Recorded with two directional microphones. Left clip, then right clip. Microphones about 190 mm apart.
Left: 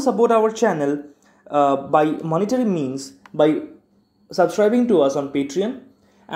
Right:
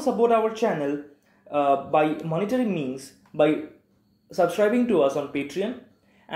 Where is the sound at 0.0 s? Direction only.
45° left (ahead or behind).